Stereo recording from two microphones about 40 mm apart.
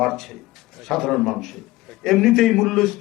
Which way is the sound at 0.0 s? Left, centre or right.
Centre.